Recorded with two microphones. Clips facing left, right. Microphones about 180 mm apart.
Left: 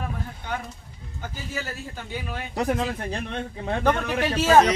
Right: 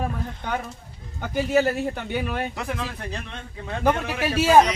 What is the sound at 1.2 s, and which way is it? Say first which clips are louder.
A man's voice: right 13 dB; 65° right (ahead or behind).